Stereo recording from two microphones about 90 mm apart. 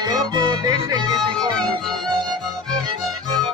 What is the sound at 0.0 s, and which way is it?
Music, 50° right (ahead or behind).